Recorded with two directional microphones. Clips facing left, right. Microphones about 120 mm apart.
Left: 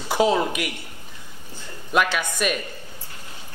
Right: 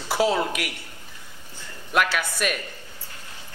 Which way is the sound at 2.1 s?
15° left (ahead or behind).